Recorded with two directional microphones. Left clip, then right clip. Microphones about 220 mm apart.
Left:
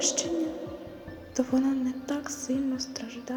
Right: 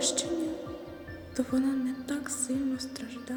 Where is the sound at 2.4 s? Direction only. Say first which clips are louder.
Left 2 dB; 25° right (ahead or behind).